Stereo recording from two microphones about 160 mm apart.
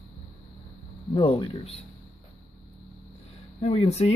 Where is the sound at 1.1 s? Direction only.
30° left (ahead or behind).